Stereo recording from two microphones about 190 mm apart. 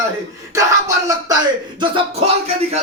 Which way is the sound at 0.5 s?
15° right (ahead or behind).